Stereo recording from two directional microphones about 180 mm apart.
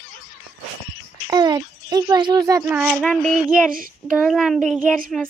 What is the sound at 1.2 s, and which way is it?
Speech, 20° right (ahead or behind).